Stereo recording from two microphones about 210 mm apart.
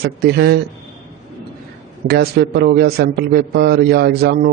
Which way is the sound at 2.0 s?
50° right (ahead or behind).